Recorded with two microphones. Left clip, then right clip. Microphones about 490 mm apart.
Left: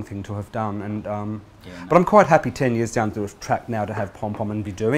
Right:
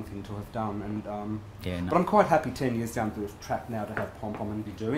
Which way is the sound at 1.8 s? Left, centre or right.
Left.